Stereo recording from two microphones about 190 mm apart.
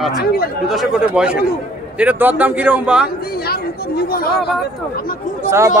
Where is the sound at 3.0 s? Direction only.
55° left (ahead or behind).